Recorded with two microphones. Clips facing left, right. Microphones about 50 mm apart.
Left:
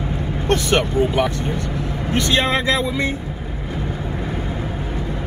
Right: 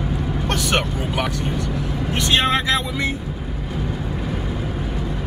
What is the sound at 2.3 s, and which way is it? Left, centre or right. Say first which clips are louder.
Speech: right 1 dB; right.